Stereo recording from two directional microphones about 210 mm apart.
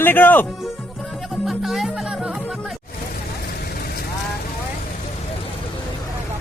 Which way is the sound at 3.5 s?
45° left (ahead or behind).